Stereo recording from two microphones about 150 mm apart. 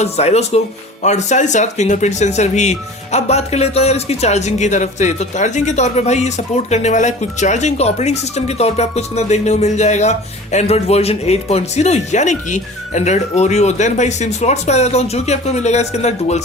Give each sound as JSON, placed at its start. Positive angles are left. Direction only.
{"t": 0.0, "sound": "speech", "side_deg": 45}